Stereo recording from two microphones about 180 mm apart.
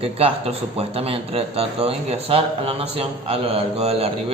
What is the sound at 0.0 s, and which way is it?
Speech, 30° right (ahead or behind).